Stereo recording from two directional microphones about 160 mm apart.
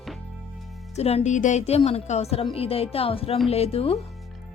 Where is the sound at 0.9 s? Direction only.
40° left (ahead or behind).